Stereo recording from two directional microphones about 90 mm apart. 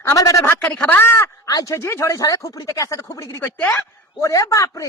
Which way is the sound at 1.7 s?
30° left (ahead or behind).